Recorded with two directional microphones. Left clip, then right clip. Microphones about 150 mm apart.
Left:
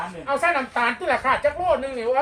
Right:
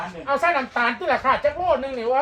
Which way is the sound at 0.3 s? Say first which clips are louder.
Right 1 dB; 20° right (ahead or behind).